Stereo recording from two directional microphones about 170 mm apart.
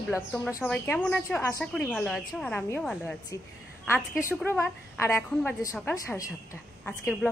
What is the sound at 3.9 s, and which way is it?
A woman's voice, 15° left (ahead or behind).